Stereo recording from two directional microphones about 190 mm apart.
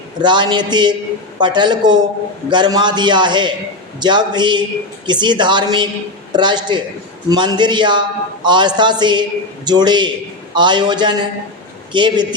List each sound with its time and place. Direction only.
0.2 s a man's voice: 25° right (ahead or behind)